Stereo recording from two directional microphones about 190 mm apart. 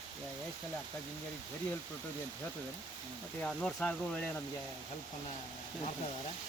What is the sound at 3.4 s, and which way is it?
Speech, 5° left (ahead or behind).